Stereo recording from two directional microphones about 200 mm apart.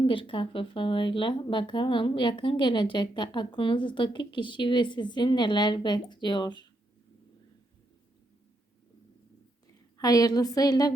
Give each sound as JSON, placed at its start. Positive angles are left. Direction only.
{"t": 0.0, "sound": "speech", "side_deg": 25}
{"t": 10.0, "sound": "speech", "side_deg": 20}